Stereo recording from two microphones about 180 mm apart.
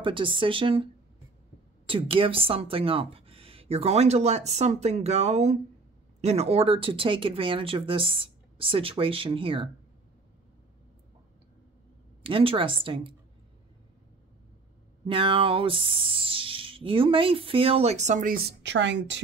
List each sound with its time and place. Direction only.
0.0 s speech: 30° right (ahead or behind)
1.9 s speech: 30° right (ahead or behind)
12.2 s speech: 30° right (ahead or behind)
15.0 s speech: 30° right (ahead or behind); by 19.2 s 80° right